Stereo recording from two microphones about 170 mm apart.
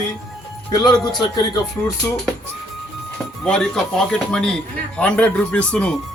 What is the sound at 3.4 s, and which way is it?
Speech, 5° left (ahead or behind).